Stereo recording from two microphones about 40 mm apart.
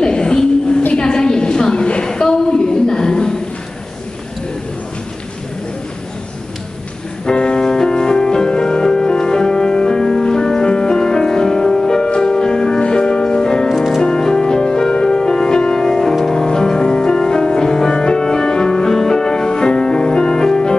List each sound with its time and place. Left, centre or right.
0.0 s a sound: left
7.2 s music: left
13.7 s music: centre